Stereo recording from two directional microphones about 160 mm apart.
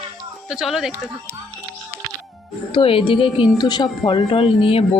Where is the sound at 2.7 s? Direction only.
35° left (ahead or behind).